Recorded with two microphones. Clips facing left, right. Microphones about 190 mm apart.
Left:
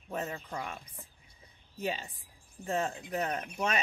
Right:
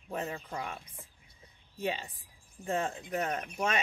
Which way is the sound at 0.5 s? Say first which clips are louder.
Even; centre (ahead or behind).